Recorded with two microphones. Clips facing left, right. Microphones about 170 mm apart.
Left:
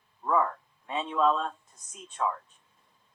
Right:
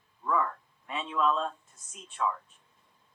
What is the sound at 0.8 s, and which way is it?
Speech, 30° left (ahead or behind).